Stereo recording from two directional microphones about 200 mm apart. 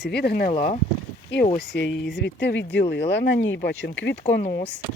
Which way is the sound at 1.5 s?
60° left (ahead or behind).